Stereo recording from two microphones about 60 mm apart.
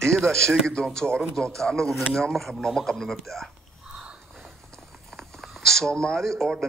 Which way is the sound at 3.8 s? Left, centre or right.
Centre.